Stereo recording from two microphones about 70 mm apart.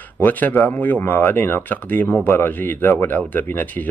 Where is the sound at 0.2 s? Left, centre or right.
Left.